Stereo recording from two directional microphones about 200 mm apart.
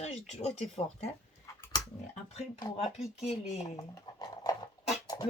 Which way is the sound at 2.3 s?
20° left (ahead or behind).